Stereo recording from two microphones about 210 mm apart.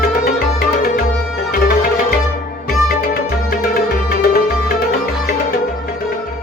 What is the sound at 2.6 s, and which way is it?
Music, 45° left (ahead or behind).